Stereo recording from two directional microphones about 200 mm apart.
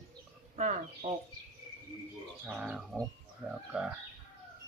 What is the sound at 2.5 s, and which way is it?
Speech, centre (ahead or behind).